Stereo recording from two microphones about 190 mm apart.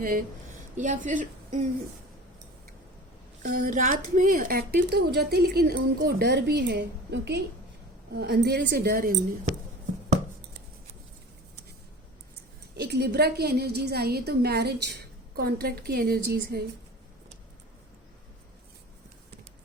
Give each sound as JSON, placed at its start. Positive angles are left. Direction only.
{"t": 0.8, "sound": "a woman's voice", "side_deg": -40}
{"t": 3.4, "sound": "speech", "side_deg": -45}
{"t": 12.7, "sound": "speech", "side_deg": -60}